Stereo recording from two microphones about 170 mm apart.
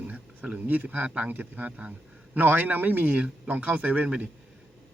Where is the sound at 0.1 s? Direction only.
10° right (ahead or behind).